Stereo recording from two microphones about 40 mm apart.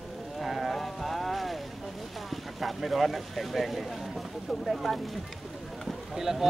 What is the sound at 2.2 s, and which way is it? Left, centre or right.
Speech, centre.